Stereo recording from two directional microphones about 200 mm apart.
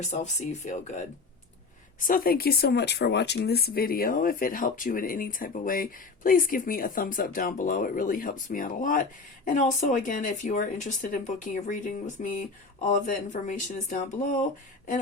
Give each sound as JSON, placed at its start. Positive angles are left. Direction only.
{"t": 0.1, "sound": "speech", "side_deg": 35}